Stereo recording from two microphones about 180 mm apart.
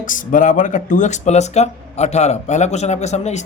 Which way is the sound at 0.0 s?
45° left (ahead or behind).